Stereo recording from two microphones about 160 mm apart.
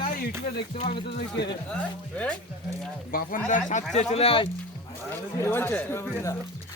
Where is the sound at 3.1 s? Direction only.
60° left (ahead or behind).